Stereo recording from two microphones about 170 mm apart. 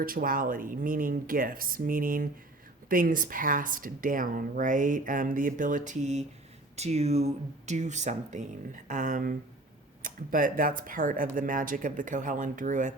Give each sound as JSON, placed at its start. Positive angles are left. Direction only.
{"t": 0.0, "sound": "speech", "side_deg": -55}